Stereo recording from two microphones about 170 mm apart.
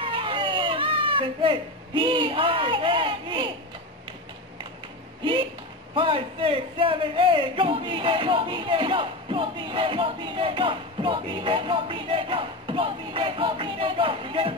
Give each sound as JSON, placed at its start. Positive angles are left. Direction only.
{"t": 0.0, "sound": "speech", "side_deg": -30}
{"t": 5.9, "sound": "a man's voice", "side_deg": -30}